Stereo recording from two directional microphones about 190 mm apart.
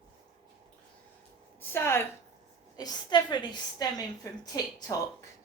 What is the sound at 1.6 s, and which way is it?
A woman's voice, 10° left (ahead or behind).